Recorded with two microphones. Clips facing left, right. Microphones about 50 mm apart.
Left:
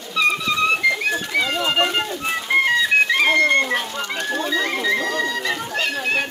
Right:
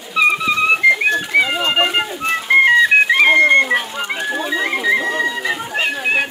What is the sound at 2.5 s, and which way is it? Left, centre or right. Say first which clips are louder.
Music: right 7 dB; right.